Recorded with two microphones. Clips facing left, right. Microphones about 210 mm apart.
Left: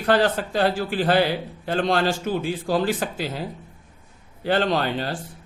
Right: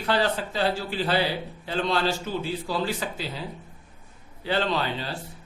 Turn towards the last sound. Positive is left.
turn(degrees=50)  # may be behind; listen again after turning